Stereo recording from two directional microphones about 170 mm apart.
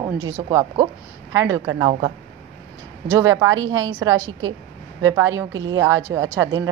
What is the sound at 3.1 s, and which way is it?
A woman's voice, 20° right (ahead or behind).